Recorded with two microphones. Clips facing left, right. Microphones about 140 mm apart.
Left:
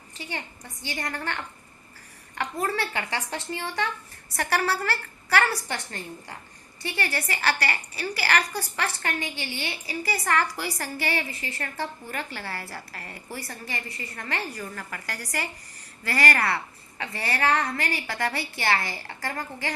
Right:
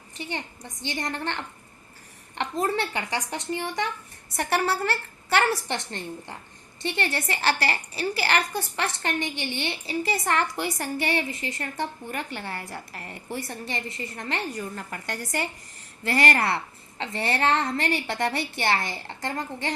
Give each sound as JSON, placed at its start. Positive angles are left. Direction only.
{"t": 0.3, "sound": "a woman's voice", "side_deg": -20}